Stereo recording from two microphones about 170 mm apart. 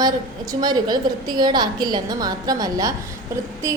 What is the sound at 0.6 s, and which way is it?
A woman's voice, 25° right (ahead or behind).